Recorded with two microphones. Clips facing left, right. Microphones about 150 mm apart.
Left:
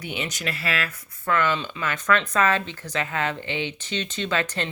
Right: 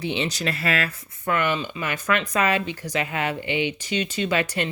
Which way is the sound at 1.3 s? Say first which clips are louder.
Even; 15° right (ahead or behind).